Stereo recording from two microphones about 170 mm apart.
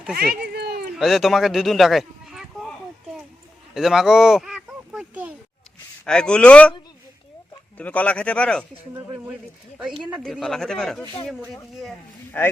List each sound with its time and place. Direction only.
0.4 s a sound: 70° right (ahead or behind)
0.9 s speech: centre (ahead or behind)
3.8 s a sound: centre (ahead or behind)
6.1 s speech: 5° left (ahead or behind)
7.8 s speech: 10° left (ahead or behind)
8.7 s speech: 15° right (ahead or behind)
10.0 s speech: 5° right (ahead or behind)